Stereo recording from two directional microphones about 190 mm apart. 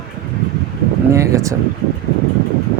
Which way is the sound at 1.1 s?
15° right (ahead or behind).